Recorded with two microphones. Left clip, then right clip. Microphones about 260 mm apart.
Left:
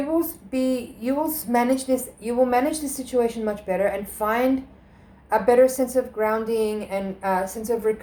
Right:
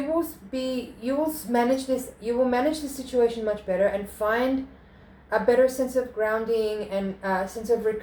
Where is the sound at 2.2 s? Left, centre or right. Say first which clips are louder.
Left 2 dB; left.